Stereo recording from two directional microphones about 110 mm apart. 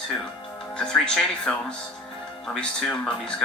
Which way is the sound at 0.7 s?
10° left (ahead or behind).